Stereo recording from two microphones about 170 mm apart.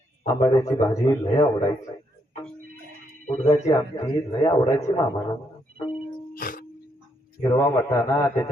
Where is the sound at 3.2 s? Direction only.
40° left (ahead or behind).